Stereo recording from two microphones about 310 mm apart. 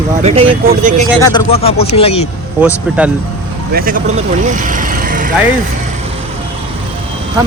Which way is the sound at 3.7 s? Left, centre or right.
Right.